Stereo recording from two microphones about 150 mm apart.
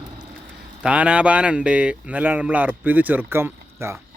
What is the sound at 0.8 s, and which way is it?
Speech, 10° right (ahead or behind).